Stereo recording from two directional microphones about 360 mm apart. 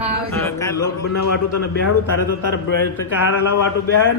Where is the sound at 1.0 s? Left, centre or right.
Left.